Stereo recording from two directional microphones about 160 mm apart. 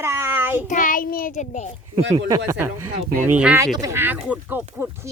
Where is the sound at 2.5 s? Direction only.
10° right (ahead or behind).